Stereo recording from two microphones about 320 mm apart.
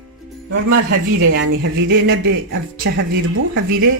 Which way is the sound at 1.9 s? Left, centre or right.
Right.